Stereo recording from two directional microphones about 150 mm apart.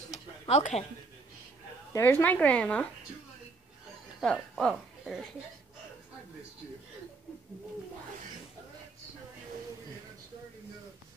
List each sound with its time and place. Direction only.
0.1 s a sound: 45° left (ahead or behind)
1.9 s speech: 15° left (ahead or behind)
4.2 s speech: 5° left (ahead or behind)